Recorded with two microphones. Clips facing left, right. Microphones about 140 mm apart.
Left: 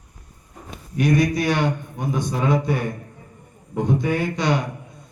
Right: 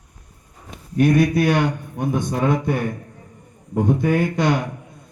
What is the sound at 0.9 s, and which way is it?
A man's voice, 55° right (ahead or behind).